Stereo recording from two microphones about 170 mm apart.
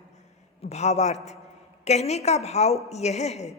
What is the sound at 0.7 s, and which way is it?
A woman's voice, 40° left (ahead or behind).